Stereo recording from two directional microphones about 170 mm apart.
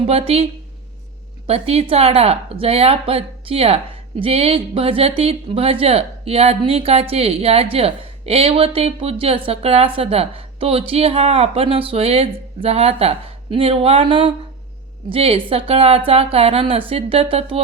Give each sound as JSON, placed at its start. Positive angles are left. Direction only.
{"t": 0.0, "sound": "speech", "side_deg": -35}
{"t": 1.5, "sound": "speech", "side_deg": -35}